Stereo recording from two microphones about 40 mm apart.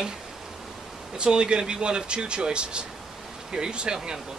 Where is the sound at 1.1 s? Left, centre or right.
Right.